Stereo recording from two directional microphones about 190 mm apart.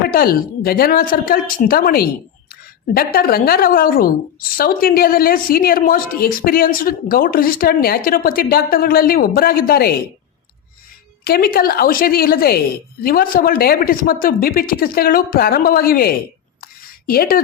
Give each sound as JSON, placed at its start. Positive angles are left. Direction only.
{"t": 0.1, "sound": "a woman's voice", "side_deg": 50}
{"t": 11.2, "sound": "a woman's voice", "side_deg": 50}